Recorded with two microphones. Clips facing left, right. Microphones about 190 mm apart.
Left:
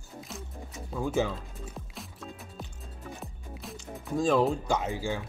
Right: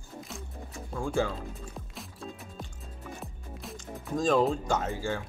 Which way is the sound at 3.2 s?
Centre (ahead or behind).